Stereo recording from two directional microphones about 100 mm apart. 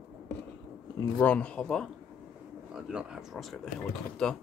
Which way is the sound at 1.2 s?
15° left (ahead or behind).